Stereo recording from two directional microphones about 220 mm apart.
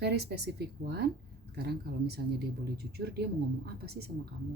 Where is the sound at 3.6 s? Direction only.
45° right (ahead or behind).